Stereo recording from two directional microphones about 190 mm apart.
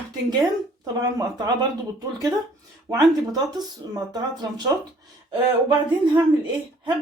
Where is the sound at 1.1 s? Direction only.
20° right (ahead or behind).